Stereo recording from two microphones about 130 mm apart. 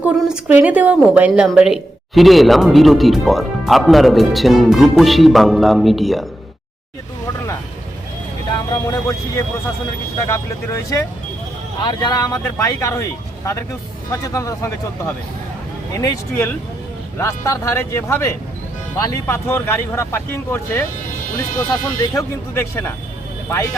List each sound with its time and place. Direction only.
0.0 s a woman's voice: 10° right (ahead or behind)
8.7 s speech: 25° left (ahead or behind)
10.2 s speech: 25° left (ahead or behind)
19.3 s speech: 20° left (ahead or behind)
21.3 s speech: 30° left (ahead or behind)